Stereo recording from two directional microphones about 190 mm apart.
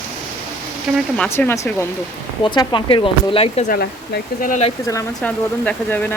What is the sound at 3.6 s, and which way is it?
Speech, 50° left (ahead or behind).